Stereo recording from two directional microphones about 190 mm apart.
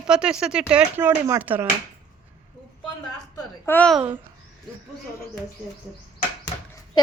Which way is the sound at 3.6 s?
10° left (ahead or behind).